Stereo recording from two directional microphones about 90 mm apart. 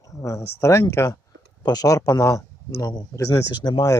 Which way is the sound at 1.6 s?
45° left (ahead or behind).